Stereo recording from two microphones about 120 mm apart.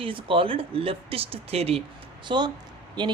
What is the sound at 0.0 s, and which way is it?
Speech, 45° right (ahead or behind).